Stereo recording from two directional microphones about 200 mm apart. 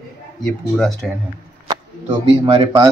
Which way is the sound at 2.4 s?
25° right (ahead or behind).